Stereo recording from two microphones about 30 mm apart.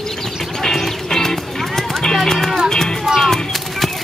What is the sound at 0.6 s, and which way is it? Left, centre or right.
Music, centre.